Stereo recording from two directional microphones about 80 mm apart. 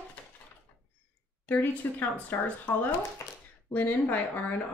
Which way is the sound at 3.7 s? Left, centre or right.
Left.